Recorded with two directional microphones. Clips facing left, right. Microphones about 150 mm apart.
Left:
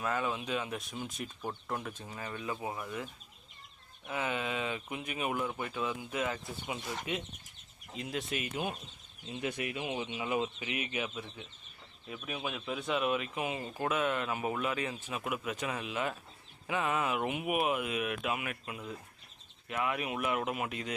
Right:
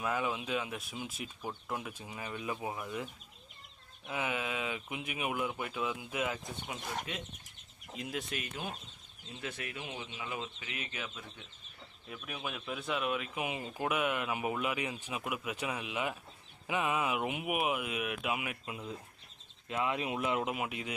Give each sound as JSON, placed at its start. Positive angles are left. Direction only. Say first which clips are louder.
{"t": 0.0, "sound": "speech", "louder": "even", "side_deg": -10}
{"t": 4.1, "sound": "speech", "louder": "left 1 dB", "side_deg": -10}
{"t": 7.1, "sound": "speech", "louder": "left 5 dB", "side_deg": 5}
{"t": 13.4, "sound": "speech", "louder": "left 1 dB", "side_deg": -15}